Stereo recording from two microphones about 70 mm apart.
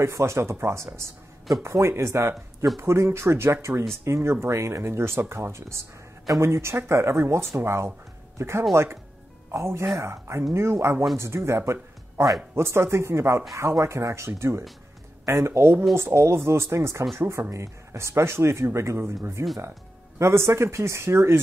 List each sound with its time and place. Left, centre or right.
0.0 s speech: right